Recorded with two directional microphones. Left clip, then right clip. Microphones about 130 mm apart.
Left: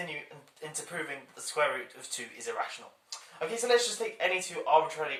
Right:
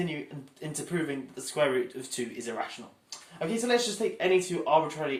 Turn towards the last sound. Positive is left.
turn(degrees=-15)  # may be behind; listen again after turning